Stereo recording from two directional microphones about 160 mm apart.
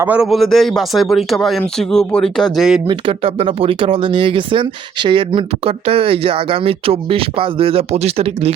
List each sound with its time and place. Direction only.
0.0 s a man's voice: 5° right (ahead or behind)
2.8 s speech: 35° right (ahead or behind)